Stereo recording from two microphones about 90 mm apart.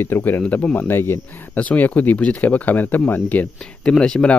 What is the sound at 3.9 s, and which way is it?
Speech, 5° left (ahead or behind).